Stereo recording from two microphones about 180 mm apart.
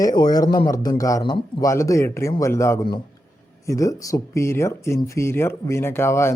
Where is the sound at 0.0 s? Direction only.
20° left (ahead or behind).